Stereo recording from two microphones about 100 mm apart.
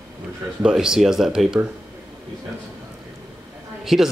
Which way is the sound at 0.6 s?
5° right (ahead or behind).